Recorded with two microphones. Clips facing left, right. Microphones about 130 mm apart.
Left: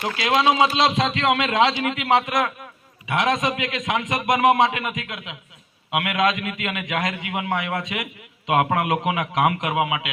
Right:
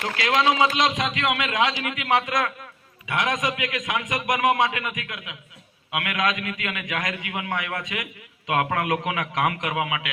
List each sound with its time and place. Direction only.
0.0 s a man's voice: 25° left (ahead or behind)